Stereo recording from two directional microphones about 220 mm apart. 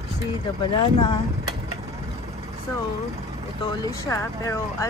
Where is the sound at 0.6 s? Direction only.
25° left (ahead or behind).